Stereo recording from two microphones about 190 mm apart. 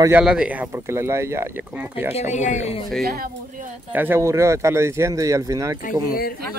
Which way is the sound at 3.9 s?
10° right (ahead or behind).